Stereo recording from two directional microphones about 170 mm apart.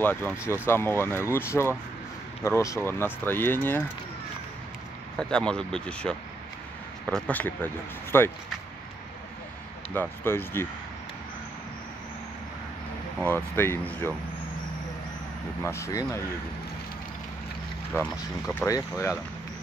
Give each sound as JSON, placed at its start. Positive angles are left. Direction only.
{"t": 0.0, "sound": "speech", "side_deg": 10}
{"t": 5.3, "sound": "speech", "side_deg": 5}
{"t": 9.9, "sound": "speech", "side_deg": 15}
{"t": 13.2, "sound": "speech", "side_deg": 10}
{"t": 15.6, "sound": "speech", "side_deg": 15}
{"t": 17.9, "sound": "speech", "side_deg": 15}